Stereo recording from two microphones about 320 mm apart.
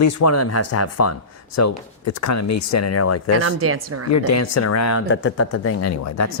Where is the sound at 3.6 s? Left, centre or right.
Right.